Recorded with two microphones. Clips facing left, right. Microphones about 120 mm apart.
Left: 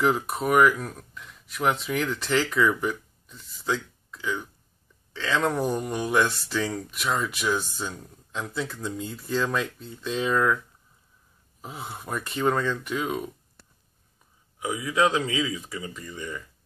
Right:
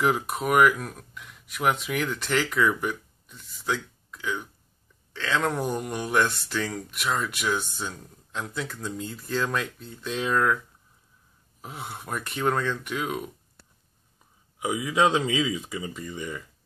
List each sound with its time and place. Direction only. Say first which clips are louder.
0.0 s speech: left 1 dB; centre (ahead or behind)
11.6 s speech: left 1 dB; centre (ahead or behind)
14.6 s speech: right 1 dB; 20° right (ahead or behind)